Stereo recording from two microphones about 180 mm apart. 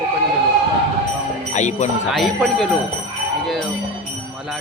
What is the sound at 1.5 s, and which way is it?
Speech, 40° left (ahead or behind).